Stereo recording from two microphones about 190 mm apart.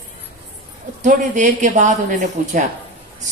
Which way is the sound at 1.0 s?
40° right (ahead or behind).